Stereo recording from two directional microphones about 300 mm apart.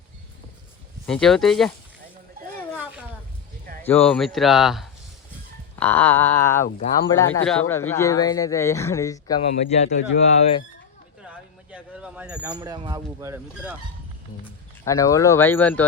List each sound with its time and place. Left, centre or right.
1.0 s speech: centre
3.8 s speech: centre
6.7 s speech: left
7.2 s speech: centre; by 9.9 s left
11.7 s speech: centre
14.4 s speech: centre